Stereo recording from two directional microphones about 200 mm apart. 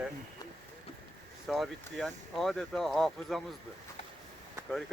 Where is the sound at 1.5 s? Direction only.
Centre (ahead or behind).